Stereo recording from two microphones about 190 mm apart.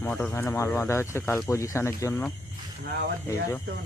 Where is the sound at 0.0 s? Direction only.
10° left (ahead or behind).